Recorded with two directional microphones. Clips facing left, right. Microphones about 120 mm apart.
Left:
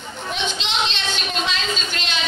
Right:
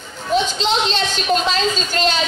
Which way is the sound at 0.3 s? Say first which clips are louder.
Right 9 dB; 40° right (ahead or behind).